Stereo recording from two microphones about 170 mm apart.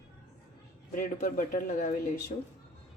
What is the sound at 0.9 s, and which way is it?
Speech, 50° left (ahead or behind).